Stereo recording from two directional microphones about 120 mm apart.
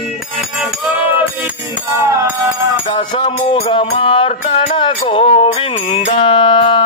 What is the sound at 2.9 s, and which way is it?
Music, 45° left (ahead or behind).